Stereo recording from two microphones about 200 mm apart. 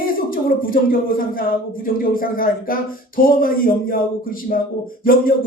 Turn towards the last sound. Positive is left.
turn(degrees=45)  # may be behind; listen again after turning